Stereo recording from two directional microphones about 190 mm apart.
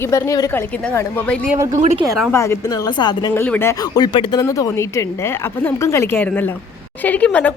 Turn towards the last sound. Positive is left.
turn(degrees=5)  # may be behind; listen again after turning